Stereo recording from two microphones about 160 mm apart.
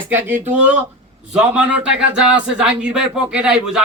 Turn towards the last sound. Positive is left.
turn(degrees=-5)  # may be behind; listen again after turning